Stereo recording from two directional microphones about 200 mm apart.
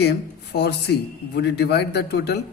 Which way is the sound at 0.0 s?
55° left (ahead or behind).